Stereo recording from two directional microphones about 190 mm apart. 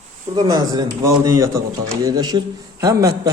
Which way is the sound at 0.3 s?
20° right (ahead or behind).